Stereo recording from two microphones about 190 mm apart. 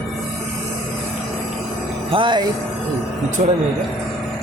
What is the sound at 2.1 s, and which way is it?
Speech, 25° right (ahead or behind).